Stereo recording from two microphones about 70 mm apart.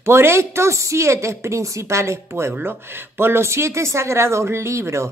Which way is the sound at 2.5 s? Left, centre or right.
Right.